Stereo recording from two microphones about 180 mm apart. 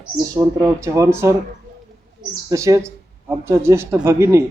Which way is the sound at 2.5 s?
15° right (ahead or behind).